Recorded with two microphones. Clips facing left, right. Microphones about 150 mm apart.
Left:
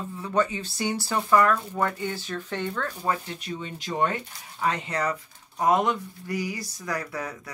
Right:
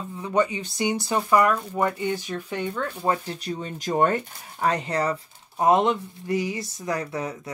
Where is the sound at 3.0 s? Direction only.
30° right (ahead or behind).